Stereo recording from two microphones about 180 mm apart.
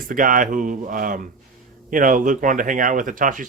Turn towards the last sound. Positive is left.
turn(degrees=-45)  # may be behind; listen again after turning